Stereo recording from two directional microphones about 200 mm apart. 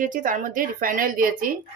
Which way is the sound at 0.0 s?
40° right (ahead or behind).